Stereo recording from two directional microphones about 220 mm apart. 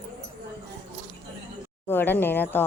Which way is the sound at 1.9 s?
10° left (ahead or behind).